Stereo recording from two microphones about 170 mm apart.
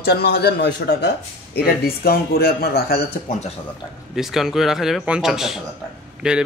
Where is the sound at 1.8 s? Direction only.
65° left (ahead or behind).